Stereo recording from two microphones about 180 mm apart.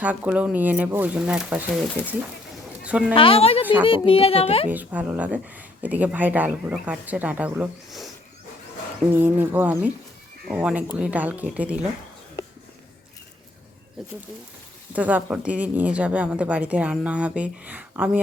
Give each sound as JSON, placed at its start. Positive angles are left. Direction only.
{"t": 0.0, "sound": "speech", "side_deg": -10}
{"t": 3.2, "sound": "a child's voice", "side_deg": 30}
{"t": 4.7, "sound": "speech", "side_deg": -10}
{"t": 9.1, "sound": "speech", "side_deg": -10}
{"t": 14.9, "sound": "speech", "side_deg": -10}